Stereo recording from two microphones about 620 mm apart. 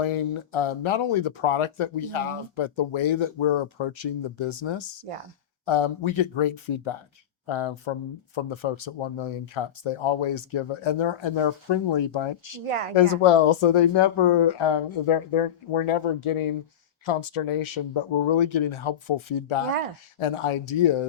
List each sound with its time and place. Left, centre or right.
0.0 s speech: left